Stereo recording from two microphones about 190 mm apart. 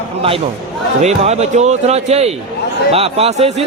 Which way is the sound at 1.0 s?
35° right (ahead or behind).